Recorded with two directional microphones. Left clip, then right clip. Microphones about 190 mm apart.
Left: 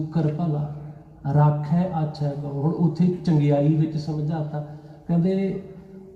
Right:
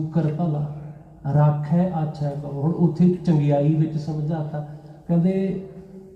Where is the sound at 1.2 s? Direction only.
20° left (ahead or behind).